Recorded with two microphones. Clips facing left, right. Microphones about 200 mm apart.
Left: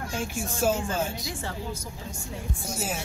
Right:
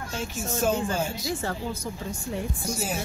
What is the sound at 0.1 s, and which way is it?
Speech, 10° left (ahead or behind).